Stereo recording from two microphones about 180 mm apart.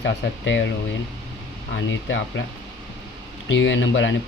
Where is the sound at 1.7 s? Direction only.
90° left.